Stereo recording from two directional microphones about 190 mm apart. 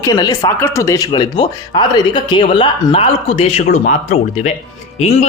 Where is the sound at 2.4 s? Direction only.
35° left (ahead or behind).